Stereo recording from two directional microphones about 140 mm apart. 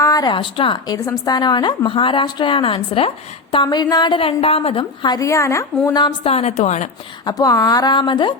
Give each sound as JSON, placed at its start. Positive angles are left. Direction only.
{"t": 0.0, "sound": "speech", "side_deg": 25}
{"t": 1.0, "sound": "a woman's voice", "side_deg": 25}
{"t": 6.2, "sound": "a woman's voice", "side_deg": 50}
{"t": 7.3, "sound": "speech", "side_deg": 25}